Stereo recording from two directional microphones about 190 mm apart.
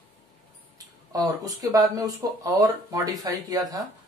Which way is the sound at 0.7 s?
20° right (ahead or behind).